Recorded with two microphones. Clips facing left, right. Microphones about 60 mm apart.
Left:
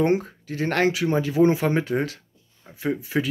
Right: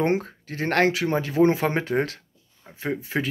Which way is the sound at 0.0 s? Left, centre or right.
Right.